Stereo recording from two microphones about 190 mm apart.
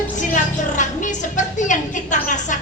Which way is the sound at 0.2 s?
40° left (ahead or behind).